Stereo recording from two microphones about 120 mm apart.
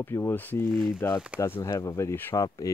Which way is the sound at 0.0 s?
20° left (ahead or behind).